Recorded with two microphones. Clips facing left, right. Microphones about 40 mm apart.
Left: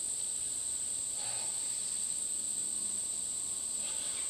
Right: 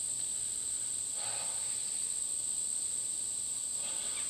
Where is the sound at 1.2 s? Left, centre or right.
Centre.